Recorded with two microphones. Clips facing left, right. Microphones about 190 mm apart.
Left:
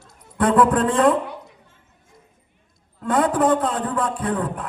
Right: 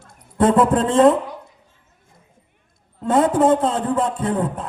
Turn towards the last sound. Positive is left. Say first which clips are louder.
# right 2 dB
turn(degrees=-25)  # may be behind; listen again after turning